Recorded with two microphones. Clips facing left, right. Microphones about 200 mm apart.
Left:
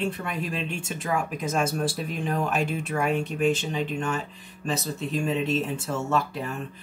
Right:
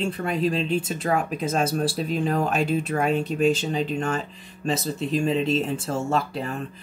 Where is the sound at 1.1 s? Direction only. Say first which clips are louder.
Right 3 dB; 35° right (ahead or behind).